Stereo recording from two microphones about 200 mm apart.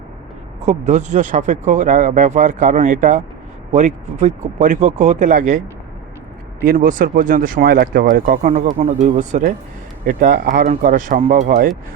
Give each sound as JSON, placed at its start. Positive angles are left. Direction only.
{"t": 0.6, "sound": "speech", "side_deg": -35}
{"t": 6.7, "sound": "speech", "side_deg": -45}